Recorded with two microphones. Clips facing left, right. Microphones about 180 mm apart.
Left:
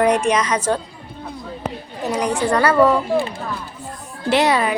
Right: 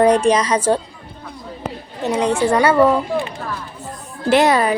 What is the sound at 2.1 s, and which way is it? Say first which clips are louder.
Speech: right 3 dB; 25° right (ahead or behind).